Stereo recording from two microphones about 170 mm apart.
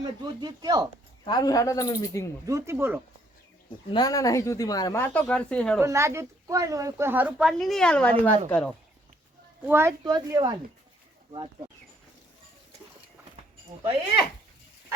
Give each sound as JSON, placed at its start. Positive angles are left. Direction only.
{"t": 0.0, "sound": "speech", "side_deg": -25}
{"t": 1.2, "sound": "speech", "side_deg": 25}
{"t": 2.5, "sound": "speech", "side_deg": -15}
{"t": 3.9, "sound": "speech", "side_deg": 20}
{"t": 5.1, "sound": "speech", "side_deg": 5}
{"t": 5.8, "sound": "speech", "side_deg": -15}
{"t": 9.6, "sound": "speech", "side_deg": -15}
{"t": 10.0, "sound": "speech", "side_deg": -25}